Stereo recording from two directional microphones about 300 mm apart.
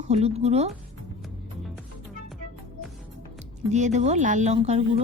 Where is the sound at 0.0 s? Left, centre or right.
Right.